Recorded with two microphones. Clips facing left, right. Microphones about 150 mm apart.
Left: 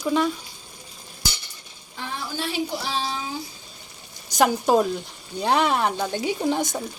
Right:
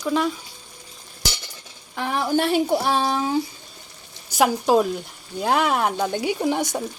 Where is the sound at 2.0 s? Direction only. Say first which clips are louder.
Right 9 dB; 65° right (ahead or behind).